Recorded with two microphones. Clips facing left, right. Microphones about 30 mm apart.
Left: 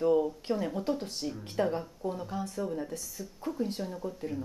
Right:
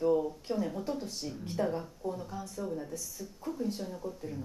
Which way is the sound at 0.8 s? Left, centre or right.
Left.